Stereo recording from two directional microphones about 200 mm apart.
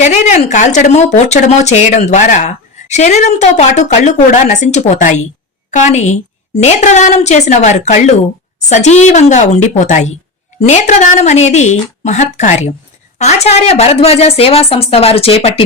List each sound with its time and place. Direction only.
0.0 s a woman's voice: 35° left (ahead or behind)